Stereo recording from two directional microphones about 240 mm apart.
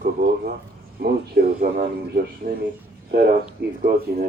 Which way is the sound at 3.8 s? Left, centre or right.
Right.